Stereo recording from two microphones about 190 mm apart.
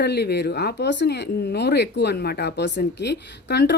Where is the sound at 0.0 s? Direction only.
60° left (ahead or behind).